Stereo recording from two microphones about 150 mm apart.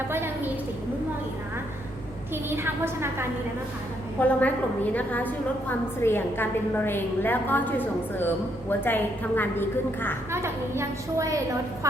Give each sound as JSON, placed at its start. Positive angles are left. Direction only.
{"t": 0.1, "sound": "a sound", "side_deg": -15}
{"t": 2.3, "sound": "a woman's voice", "side_deg": -15}
{"t": 4.2, "sound": "a woman's voice", "side_deg": 10}
{"t": 10.3, "sound": "a woman's voice", "side_deg": -15}